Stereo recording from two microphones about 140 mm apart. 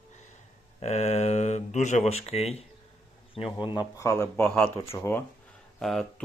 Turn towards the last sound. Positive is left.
turn(degrees=5)  # may be behind; listen again after turning